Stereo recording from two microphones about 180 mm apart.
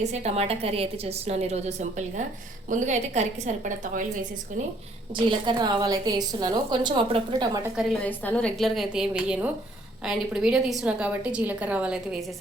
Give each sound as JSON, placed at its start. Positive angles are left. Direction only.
{"t": 0.1, "sound": "a woman's voice", "side_deg": -35}
{"t": 5.1, "sound": "a woman's voice", "side_deg": -25}
{"t": 7.8, "sound": "a woman's voice", "side_deg": 5}